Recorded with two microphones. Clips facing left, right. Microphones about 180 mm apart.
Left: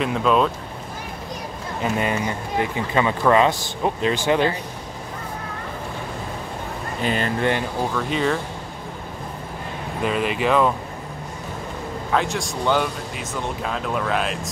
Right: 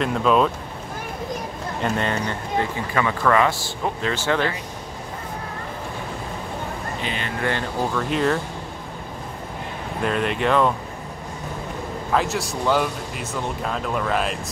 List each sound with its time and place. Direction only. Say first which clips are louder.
0.0 s speech: even; centre (ahead or behind)
1.8 s speech: left 1 dB; 5° left (ahead or behind)
2.9 s speech: left 3 dB; 20° left (ahead or behind)
7.0 s speech: left 9 dB; 45° left (ahead or behind)
7.9 s speech: right 2 dB; centre (ahead or behind)
10.0 s speech: even; 5° left (ahead or behind)
12.1 s speech: even; centre (ahead or behind)